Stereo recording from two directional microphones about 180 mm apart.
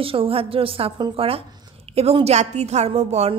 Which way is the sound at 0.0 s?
30° right (ahead or behind).